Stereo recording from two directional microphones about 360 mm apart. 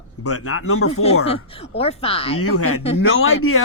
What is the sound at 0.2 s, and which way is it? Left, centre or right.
Speech, left.